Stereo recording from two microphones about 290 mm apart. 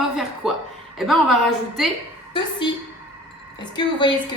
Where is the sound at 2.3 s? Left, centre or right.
Centre.